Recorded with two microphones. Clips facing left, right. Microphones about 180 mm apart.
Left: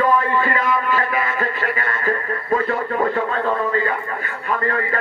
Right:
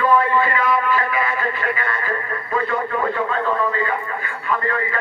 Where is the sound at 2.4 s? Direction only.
40° left (ahead or behind).